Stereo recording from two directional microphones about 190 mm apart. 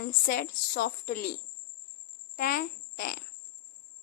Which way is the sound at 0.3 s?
55° left (ahead or behind).